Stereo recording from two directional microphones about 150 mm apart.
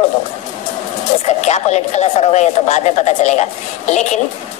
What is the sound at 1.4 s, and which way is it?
A woman's voice, 50° left (ahead or behind).